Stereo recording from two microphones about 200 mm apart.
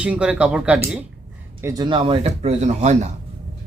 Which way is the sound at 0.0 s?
5° right (ahead or behind).